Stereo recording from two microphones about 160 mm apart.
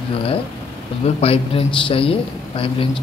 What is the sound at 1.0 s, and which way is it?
A man's voice, 35° left (ahead or behind).